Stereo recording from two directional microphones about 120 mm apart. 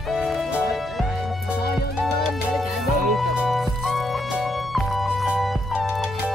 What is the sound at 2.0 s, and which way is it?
Music, centre (ahead or behind).